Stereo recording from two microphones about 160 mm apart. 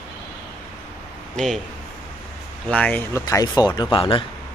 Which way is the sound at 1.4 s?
Centre (ahead or behind).